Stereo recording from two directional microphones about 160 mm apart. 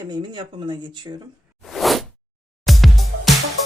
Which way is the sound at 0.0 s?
30° right (ahead or behind).